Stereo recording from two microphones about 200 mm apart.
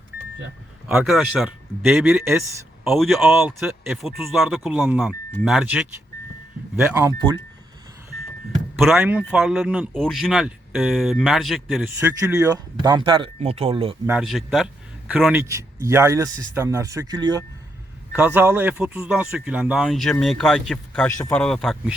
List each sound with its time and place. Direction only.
0.9 s speech: centre (ahead or behind)
3.2 s a man's voice: 10° right (ahead or behind)
8.8 s speech: centre (ahead or behind)
11.9 s speech: 10° right (ahead or behind); by 13.9 s 30° right (ahead or behind)
14.1 s a man's voice: centre (ahead or behind); by 17.4 s 20° right (ahead or behind)
18.1 s speech: 10° right (ahead or behind)